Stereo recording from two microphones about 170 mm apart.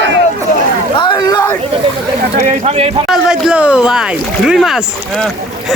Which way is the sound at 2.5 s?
35° right (ahead or behind).